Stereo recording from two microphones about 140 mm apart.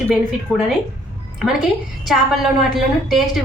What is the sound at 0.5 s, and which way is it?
Speech, 10° left (ahead or behind).